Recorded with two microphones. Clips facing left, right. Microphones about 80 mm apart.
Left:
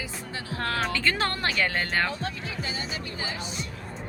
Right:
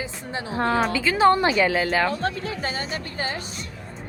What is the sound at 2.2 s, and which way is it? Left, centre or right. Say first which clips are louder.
Speech: right 7 dB; right.